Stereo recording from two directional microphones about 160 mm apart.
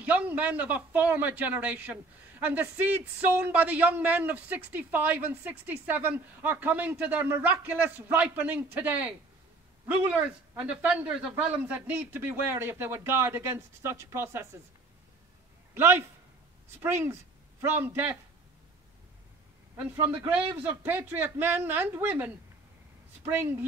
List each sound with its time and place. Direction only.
0.0 s speech: 10° right (ahead or behind)
15.7 s a man's voice: 15° right (ahead or behind)
19.8 s speech: 10° right (ahead or behind)